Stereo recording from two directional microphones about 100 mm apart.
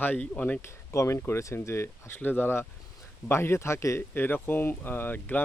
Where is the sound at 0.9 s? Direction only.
30° left (ahead or behind).